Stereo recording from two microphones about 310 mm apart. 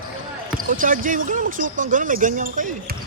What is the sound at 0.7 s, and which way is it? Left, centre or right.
Speech, right.